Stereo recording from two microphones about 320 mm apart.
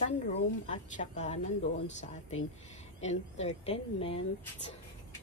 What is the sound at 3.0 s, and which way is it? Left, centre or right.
A woman's voice, left.